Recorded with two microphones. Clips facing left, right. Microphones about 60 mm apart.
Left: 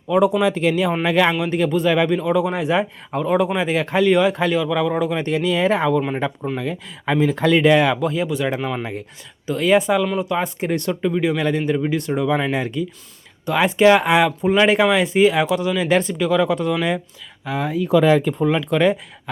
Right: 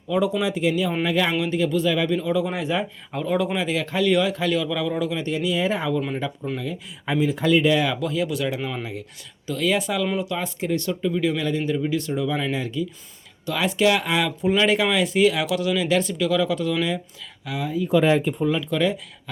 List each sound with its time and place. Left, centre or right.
0.4 s speech: left
1.4 s speech: left
3.2 s speech: left
5.2 s speech: left
8.0 s speech: left
13.4 s speech: left
17.6 s speech: left